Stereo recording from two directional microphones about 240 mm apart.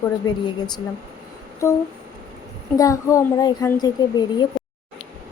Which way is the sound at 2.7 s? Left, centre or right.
Centre.